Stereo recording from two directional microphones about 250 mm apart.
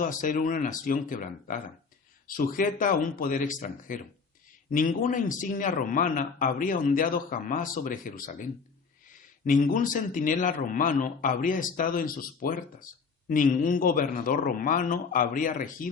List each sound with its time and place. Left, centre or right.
0.0 s a man's voice: left